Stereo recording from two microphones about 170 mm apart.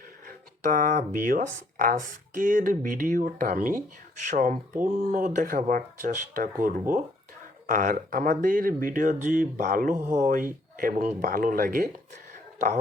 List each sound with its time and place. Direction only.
0.3 s speech: 55° right (ahead or behind)